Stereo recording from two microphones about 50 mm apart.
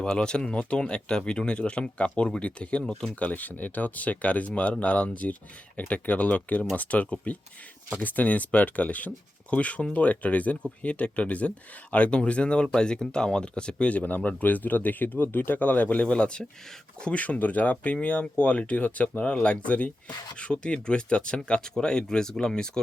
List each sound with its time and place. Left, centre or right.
0.0 s speech: centre